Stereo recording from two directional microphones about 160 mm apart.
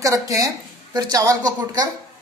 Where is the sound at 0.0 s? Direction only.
20° right (ahead or behind).